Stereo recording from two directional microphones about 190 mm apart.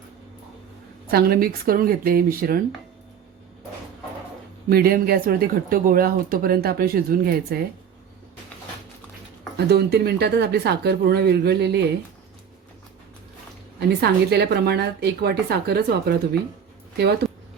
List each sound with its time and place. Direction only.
1.0 s speech: 55° right (ahead or behind)
4.7 s speech: 50° right (ahead or behind)
9.6 s a woman's voice: 60° right (ahead or behind)
13.7 s a woman's voice: 60° right (ahead or behind)